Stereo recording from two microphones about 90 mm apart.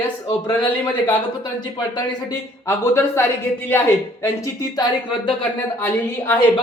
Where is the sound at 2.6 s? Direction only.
25° left (ahead or behind).